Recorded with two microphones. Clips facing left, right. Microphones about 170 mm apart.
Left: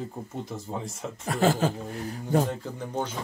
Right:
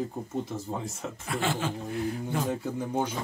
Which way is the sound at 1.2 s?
40° left (ahead or behind).